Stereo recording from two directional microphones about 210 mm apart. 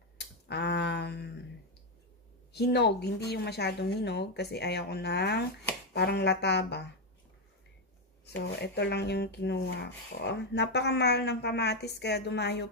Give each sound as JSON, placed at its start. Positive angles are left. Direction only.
{"t": 0.5, "sound": "a sound", "side_deg": 55}
{"t": 2.5, "sound": "speech", "side_deg": 50}
{"t": 8.5, "sound": "speech", "side_deg": 50}